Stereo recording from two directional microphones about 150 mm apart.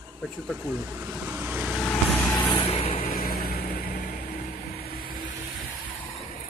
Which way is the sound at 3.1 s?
75° left (ahead or behind).